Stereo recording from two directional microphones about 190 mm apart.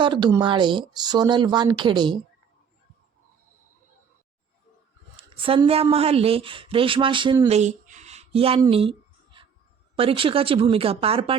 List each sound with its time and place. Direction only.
0.0 s speech: 25° right (ahead or behind)
5.1 s speech: 25° right (ahead or behind)
8.6 s a sound: 30° right (ahead or behind)
9.9 s speech: 30° right (ahead or behind)